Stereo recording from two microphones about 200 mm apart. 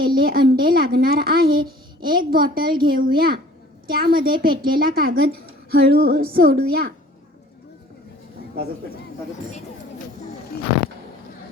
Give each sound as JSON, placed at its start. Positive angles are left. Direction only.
{"t": 0.0, "sound": "speech", "side_deg": -50}